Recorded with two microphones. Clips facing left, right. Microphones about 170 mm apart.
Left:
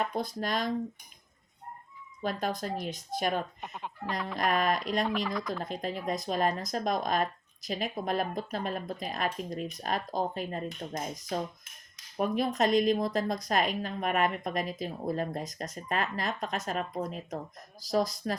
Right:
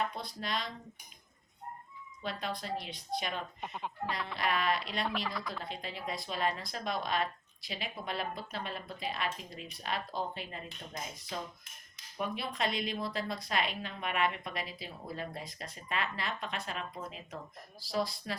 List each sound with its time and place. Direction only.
0.1 s a woman's voice: 45° left (ahead or behind)
2.2 s a woman's voice: 45° left (ahead or behind)
3.6 s speech: centre (ahead or behind)
4.4 s a woman's voice: 45° left (ahead or behind)
5.0 s speech: centre (ahead or behind)
5.6 s a woman's voice: 45° left (ahead or behind)